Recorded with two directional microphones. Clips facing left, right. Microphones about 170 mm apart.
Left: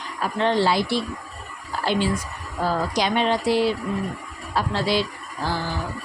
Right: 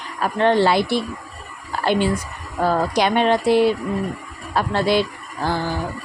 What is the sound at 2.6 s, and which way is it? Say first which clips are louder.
A woman's voice: right 4 dB; 60° right (ahead or behind).